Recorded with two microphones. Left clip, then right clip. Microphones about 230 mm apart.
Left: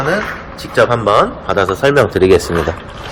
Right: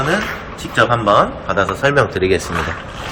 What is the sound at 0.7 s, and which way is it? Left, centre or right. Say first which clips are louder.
A man's voice: left 2 dB; left.